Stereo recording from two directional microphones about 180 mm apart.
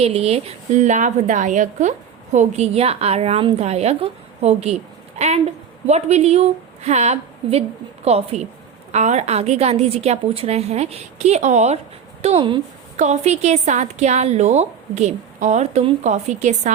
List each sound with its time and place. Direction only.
0.0 s a woman's voice: 35° right (ahead or behind)